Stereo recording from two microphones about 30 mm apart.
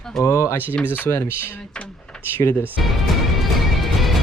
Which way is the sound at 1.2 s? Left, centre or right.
Right.